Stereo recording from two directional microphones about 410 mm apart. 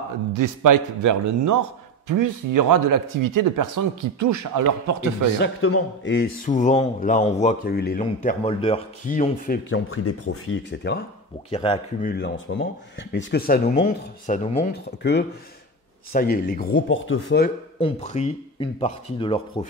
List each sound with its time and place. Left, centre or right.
0.3 s speech: right
5.4 s a man's voice: left
11.5 s a man's voice: centre
17.7 s speech: centre